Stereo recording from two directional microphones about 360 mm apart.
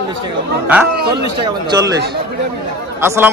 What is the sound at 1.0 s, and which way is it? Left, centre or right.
Speech, right.